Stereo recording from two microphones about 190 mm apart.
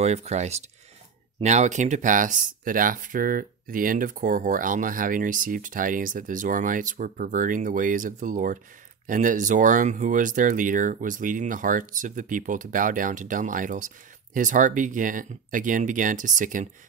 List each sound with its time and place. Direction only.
0.0 s speech: 35° right (ahead or behind)